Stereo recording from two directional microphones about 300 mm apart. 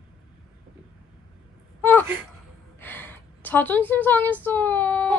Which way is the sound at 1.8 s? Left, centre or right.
Centre.